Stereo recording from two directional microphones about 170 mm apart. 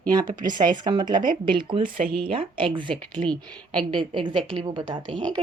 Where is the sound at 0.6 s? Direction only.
25° right (ahead or behind).